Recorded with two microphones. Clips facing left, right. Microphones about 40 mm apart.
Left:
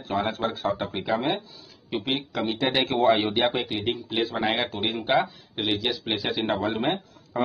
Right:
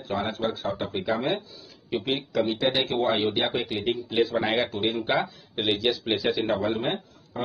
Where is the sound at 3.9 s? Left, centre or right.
Left.